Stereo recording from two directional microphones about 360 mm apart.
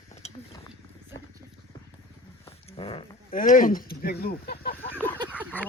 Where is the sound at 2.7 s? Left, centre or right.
Centre.